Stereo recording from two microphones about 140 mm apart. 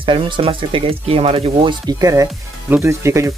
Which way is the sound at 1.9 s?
25° right (ahead or behind).